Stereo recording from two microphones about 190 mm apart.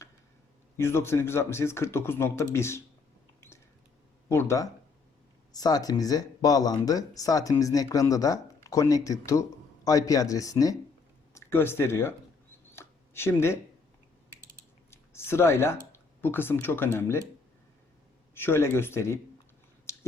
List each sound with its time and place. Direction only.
0.8 s a man's voice: 15° left (ahead or behind)
4.3 s a man's voice: 15° left (ahead or behind)
12.7 s a sound: 10° left (ahead or behind)
14.8 s speech: 15° left (ahead or behind)
18.3 s a man's voice: 10° left (ahead or behind)
19.9 s finger snapping: 15° left (ahead or behind)